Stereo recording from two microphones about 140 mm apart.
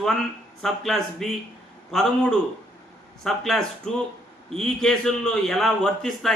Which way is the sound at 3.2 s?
Centre (ahead or behind).